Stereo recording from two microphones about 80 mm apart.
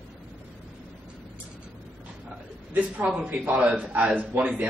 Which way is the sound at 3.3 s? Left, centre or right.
Right.